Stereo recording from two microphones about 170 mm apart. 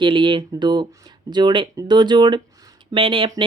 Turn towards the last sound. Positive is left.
turn(degrees=-30)  # may be behind; listen again after turning